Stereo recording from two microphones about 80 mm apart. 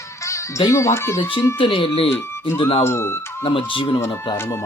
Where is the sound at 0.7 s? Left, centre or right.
Left.